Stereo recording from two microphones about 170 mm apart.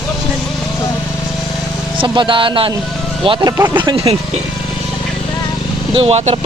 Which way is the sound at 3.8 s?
30° right (ahead or behind).